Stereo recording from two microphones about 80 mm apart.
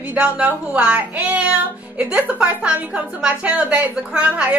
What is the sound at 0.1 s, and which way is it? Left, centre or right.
Speech, centre.